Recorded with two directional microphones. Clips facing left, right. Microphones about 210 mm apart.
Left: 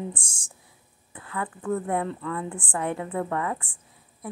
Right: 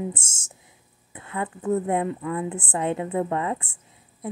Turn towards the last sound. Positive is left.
turn(degrees=-25)  # may be behind; listen again after turning